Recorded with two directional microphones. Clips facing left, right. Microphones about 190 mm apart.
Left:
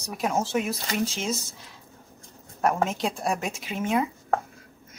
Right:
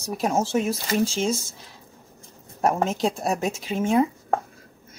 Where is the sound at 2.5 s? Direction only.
25° right (ahead or behind).